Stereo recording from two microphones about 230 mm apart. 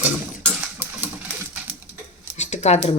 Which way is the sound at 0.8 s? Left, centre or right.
Centre.